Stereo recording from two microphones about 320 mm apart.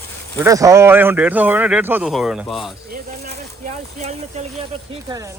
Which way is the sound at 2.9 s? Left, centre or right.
Right.